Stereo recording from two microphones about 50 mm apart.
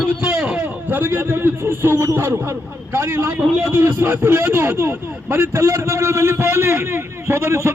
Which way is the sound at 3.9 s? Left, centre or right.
Right.